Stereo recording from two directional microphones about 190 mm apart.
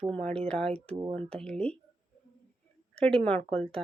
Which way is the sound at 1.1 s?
30° right (ahead or behind).